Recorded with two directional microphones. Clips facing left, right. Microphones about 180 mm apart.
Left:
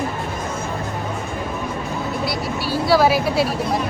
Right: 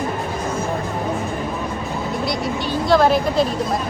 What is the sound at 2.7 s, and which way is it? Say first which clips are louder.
Speech: even; 5° left (ahead or behind).